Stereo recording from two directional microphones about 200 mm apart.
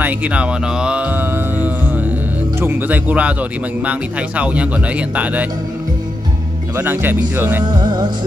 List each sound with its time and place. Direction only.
0.0 s music: 5° right (ahead or behind)
2.6 s speech: 10° right (ahead or behind)
4.4 s speech: 5° right (ahead or behind)
6.8 s speech: 10° right (ahead or behind)
7.6 s music: 20° right (ahead or behind)